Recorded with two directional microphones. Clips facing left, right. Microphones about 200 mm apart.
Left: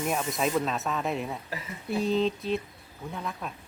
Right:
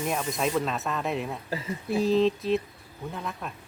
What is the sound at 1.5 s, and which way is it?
Speech, 30° right (ahead or behind).